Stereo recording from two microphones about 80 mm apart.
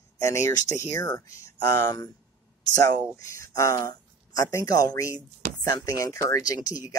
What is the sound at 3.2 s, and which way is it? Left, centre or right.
Speech, left.